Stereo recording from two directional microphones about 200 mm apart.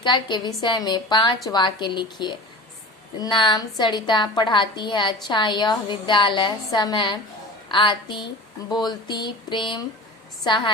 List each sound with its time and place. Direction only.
0.0 s a woman's voice: 20° left (ahead or behind)